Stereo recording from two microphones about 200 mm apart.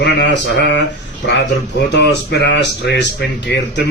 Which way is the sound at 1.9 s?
60° left (ahead or behind).